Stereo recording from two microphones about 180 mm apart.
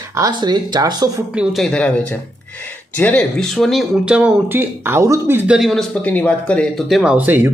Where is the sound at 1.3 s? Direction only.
5° right (ahead or behind).